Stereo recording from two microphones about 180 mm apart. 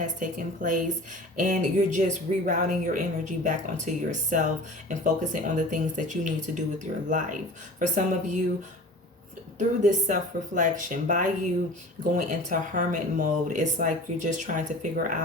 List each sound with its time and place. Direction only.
0.0 s speech: 45° right (ahead or behind)
9.6 s speech: 45° right (ahead or behind)